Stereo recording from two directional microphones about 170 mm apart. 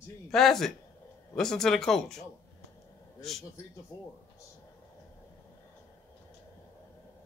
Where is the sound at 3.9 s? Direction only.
20° left (ahead or behind).